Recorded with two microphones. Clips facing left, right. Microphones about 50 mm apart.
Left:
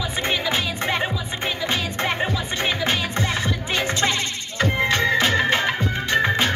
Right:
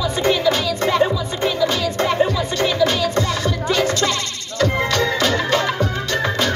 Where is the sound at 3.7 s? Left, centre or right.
Left.